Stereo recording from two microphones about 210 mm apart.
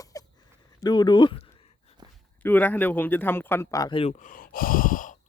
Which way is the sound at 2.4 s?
10° left (ahead or behind).